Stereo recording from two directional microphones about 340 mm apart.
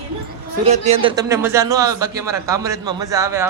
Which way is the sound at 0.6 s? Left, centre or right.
Centre.